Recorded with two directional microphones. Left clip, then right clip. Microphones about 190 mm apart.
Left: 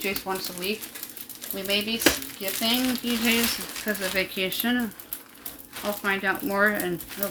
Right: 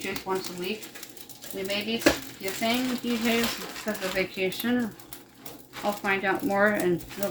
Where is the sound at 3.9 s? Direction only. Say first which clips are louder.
Left 3 dB; 55° left (ahead or behind).